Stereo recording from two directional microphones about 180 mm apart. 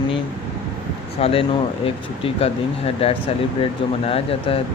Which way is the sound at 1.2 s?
30° left (ahead or behind).